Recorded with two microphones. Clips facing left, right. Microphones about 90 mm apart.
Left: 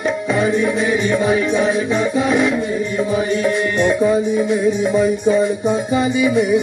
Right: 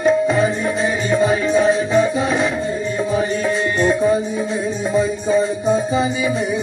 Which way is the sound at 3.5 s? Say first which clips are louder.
Left 1 dB; 60° left (ahead or behind).